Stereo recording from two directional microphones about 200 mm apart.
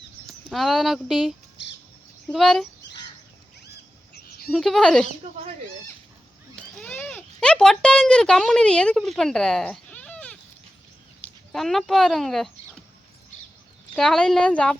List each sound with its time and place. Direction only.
0.3 s speech: centre (ahead or behind)
1.6 s squawk: 65° left (ahead or behind)
2.2 s speech: centre (ahead or behind)
4.1 s a sound: 50° left (ahead or behind)
4.5 s speech: centre (ahead or behind)
5.2 s speech: 30° right (ahead or behind)
6.6 s speech: 5° left (ahead or behind)
11.5 s speech: centre (ahead or behind)
13.9 s speech: centre (ahead or behind)